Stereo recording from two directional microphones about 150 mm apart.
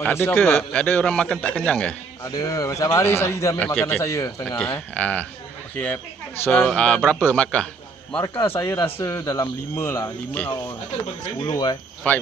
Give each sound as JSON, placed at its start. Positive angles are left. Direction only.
{"t": 0.0, "sound": "a man's voice", "side_deg": 15}
{"t": 2.2, "sound": "a man's voice", "side_deg": 25}
{"t": 4.6, "sound": "a man's voice", "side_deg": 10}
{"t": 6.4, "sound": "a man's voice", "side_deg": 15}
{"t": 11.4, "sound": "speech", "side_deg": 30}
{"t": 12.1, "sound": "a man's voice", "side_deg": 10}